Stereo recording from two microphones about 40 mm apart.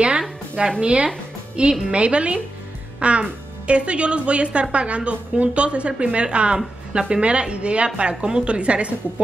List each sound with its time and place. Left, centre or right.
0.7 s a woman's voice: right